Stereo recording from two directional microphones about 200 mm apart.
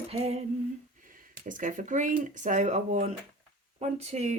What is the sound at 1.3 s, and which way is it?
Speech, 40° right (ahead or behind).